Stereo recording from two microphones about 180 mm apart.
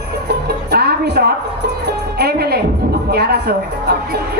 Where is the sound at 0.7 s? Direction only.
60° right (ahead or behind).